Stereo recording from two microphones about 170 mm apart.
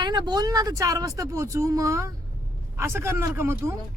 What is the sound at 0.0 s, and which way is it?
Speech, 25° right (ahead or behind).